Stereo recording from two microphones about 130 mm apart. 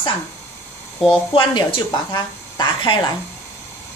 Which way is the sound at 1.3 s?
40° left (ahead or behind).